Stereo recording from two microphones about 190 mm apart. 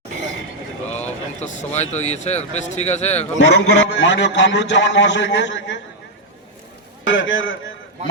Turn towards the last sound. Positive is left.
turn(degrees=85)